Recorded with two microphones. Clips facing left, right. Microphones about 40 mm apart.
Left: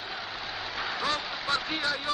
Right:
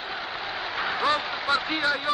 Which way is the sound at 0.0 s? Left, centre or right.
Centre.